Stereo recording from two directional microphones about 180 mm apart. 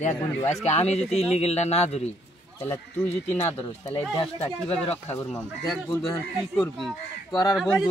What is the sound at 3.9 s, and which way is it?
Speech, 30° left (ahead or behind).